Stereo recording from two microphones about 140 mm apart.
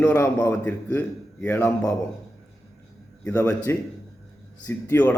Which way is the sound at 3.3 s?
15° left (ahead or behind).